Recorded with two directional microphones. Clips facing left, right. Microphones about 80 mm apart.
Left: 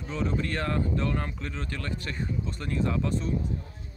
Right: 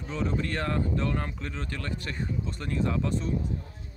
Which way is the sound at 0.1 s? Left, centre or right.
Right.